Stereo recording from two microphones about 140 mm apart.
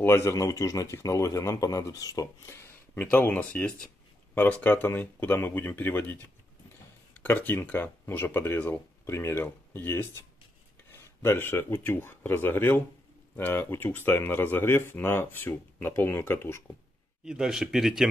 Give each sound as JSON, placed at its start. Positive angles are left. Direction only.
{"t": 0.0, "sound": "speech", "side_deg": 20}
{"t": 7.2, "sound": "speech", "side_deg": 15}
{"t": 17.2, "sound": "speech", "side_deg": -5}